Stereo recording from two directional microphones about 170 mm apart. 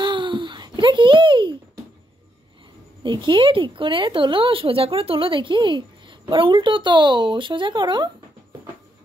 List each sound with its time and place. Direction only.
0.0 s babbling: 30° right (ahead or behind)
3.0 s a woman's voice: 25° right (ahead or behind)